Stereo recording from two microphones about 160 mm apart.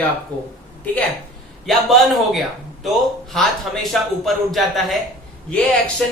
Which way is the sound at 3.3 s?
Centre (ahead or behind).